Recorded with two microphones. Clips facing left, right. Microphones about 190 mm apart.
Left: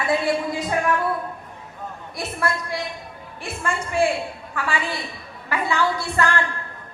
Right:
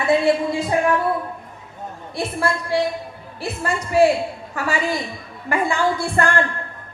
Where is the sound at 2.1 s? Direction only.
30° right (ahead or behind).